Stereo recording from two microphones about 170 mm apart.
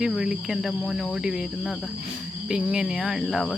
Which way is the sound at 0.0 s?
5° right (ahead or behind).